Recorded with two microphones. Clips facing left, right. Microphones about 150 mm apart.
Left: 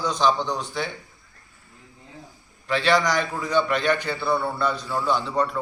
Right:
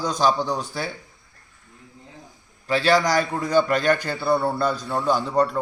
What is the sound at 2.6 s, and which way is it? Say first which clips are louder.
A man's voice: right 2 dB; 35° right (ahead or behind).